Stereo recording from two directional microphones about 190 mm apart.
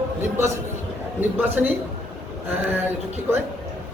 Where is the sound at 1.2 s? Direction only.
10° right (ahead or behind).